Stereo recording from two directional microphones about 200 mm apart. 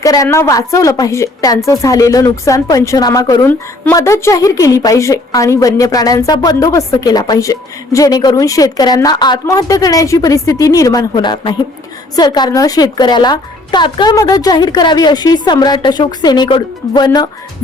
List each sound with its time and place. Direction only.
0.0 s a woman's voice: 15° left (ahead or behind)